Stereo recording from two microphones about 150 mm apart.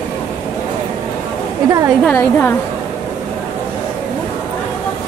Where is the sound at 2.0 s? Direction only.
10° left (ahead or behind).